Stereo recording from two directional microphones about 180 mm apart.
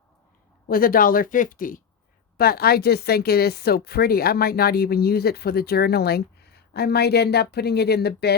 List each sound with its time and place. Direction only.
0.7 s a woman's voice: 55° left (ahead or behind)